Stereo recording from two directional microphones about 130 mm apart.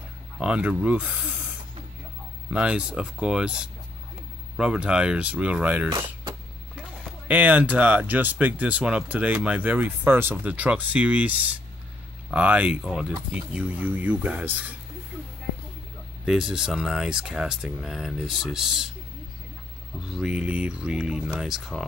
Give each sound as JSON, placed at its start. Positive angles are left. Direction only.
{"t": 0.4, "sound": "speech", "side_deg": -10}
{"t": 2.5, "sound": "speech", "side_deg": -5}
{"t": 7.2, "sound": "speech", "side_deg": -10}
{"t": 16.3, "sound": "speech", "side_deg": -5}
{"t": 20.1, "sound": "speech", "side_deg": -5}